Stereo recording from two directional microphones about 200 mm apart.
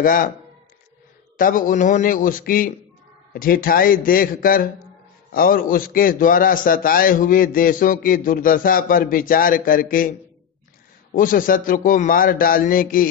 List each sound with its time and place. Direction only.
0.0 s a man's voice: 45° left (ahead or behind)
1.3 s a man's voice: 45° left (ahead or behind)
11.1 s a man's voice: 45° left (ahead or behind)